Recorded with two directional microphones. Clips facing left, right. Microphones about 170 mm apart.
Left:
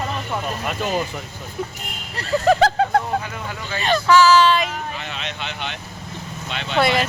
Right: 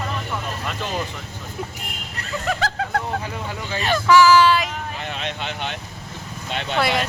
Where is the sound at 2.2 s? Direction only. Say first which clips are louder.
Left 9 dB; 35° left (ahead or behind).